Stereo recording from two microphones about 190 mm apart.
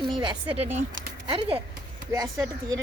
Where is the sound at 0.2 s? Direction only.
25° right (ahead or behind).